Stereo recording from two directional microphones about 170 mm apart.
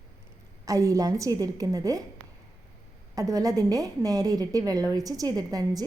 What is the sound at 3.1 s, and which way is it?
A woman's voice, 20° right (ahead or behind).